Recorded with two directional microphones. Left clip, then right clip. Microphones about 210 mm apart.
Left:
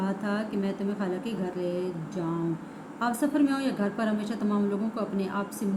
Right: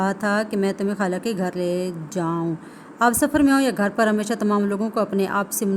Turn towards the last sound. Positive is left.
turn(degrees=-55)  # may be behind; listen again after turning